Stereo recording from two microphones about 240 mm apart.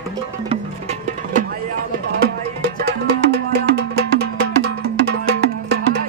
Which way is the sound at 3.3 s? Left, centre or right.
Right.